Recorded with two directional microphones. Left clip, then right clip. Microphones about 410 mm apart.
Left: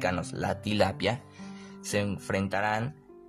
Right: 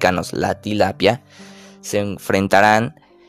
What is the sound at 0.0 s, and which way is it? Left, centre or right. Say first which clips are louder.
Speech: right 13 dB; right.